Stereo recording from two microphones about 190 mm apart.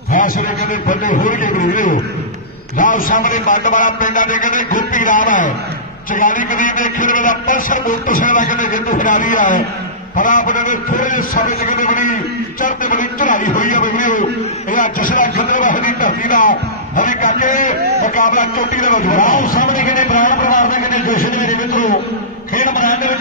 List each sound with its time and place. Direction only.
0.1 s speech: 45° left (ahead or behind)